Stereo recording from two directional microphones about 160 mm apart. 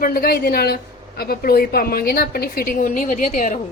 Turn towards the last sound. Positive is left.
turn(degrees=50)  # may be behind; listen again after turning